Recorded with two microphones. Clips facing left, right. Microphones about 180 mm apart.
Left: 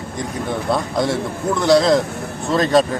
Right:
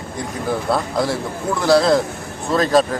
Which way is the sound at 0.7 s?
Centre (ahead or behind).